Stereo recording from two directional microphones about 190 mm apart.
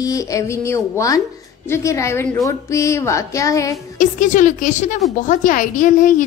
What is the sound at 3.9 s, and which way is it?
A woman's voice, 40° left (ahead or behind).